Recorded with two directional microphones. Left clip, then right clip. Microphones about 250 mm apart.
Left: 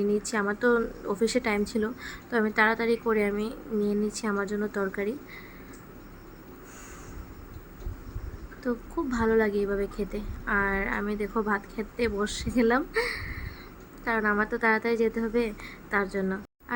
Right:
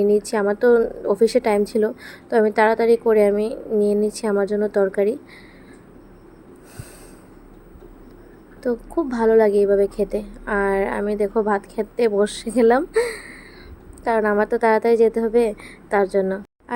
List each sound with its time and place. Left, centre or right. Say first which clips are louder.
0.3 s a woman's voice: right 9 dB; centre
8.6 s a woman's voice: right 8 dB; centre